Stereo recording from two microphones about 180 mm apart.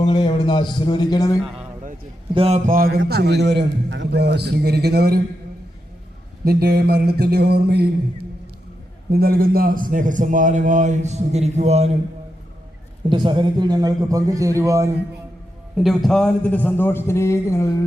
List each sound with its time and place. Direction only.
0.0 s a man's voice: 25° left (ahead or behind)
2.3 s a sound: 30° right (ahead or behind)
2.6 s a man's voice: 55° right (ahead or behind)
3.0 s a man's voice: 65° right (ahead or behind)
6.4 s mantra: 60° right (ahead or behind)
9.1 s a man's voice: 55° right (ahead or behind); by 11.9 s 35° right (ahead or behind)
13.1 s a man's voice: 25° right (ahead or behind)
15.8 s a man's voice: centre (ahead or behind); by 17.7 s 15° left (ahead or behind)